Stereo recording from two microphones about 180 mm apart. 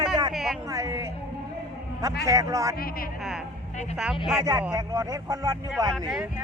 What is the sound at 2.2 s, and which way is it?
Speech, 20° right (ahead or behind).